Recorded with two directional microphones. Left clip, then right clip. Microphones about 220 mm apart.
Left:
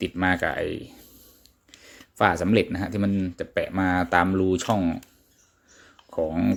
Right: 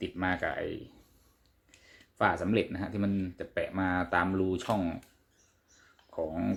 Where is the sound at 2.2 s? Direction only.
40° left (ahead or behind).